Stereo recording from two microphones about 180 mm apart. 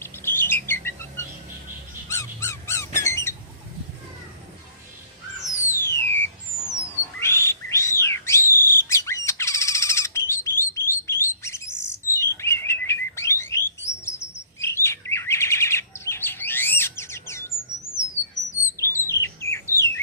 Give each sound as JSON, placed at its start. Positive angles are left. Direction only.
{"t": 0.0, "sound": "bird", "side_deg": 10}
{"t": 2.0, "sound": "squeak", "side_deg": 15}
{"t": 5.5, "sound": "music", "side_deg": 15}
{"t": 7.2, "sound": "bird", "side_deg": 15}
{"t": 13.5, "sound": "alarm", "side_deg": 15}
{"t": 14.6, "sound": "chirp", "side_deg": 15}
{"t": 18.8, "sound": "bird", "side_deg": 15}